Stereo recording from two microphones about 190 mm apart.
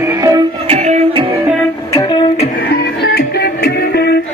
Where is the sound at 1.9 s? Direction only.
25° left (ahead or behind).